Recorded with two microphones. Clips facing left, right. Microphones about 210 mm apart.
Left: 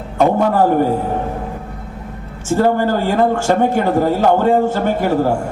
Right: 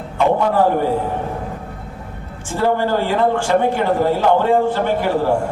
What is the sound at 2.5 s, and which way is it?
A man's voice, 45° left (ahead or behind).